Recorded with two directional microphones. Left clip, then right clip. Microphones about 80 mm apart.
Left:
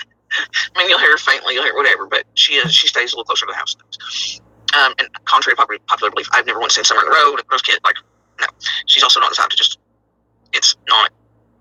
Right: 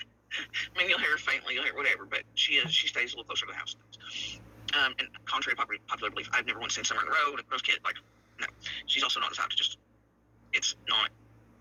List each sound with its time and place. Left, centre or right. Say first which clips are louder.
0.0 s telephone: left 17 dB; centre
1.6 s speech: left 18 dB; left